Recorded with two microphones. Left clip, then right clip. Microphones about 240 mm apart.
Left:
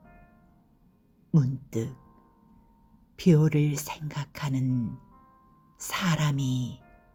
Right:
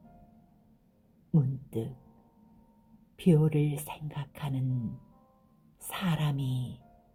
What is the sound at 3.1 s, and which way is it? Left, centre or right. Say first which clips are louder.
Speech: left 3 dB; left.